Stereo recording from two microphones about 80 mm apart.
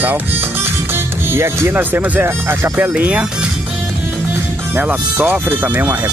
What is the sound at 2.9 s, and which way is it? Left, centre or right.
Speech, centre.